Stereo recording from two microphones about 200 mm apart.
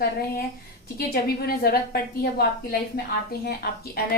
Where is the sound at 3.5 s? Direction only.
50° left (ahead or behind).